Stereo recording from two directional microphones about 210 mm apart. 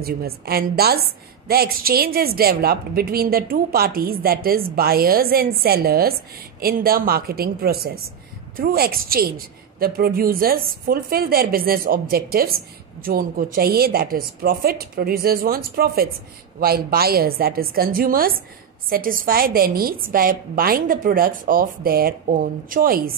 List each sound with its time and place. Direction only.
0.0 s a woman's voice: 45° right (ahead or behind)